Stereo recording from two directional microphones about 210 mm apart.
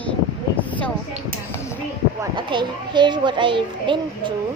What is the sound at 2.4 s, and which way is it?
A child's voice, 20° right (ahead or behind).